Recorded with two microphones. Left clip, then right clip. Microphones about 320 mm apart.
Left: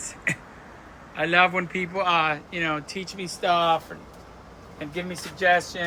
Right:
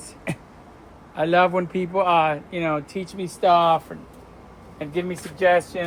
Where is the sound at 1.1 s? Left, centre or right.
Centre.